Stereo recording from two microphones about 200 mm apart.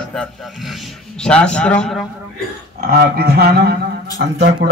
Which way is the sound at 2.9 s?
50° right (ahead or behind).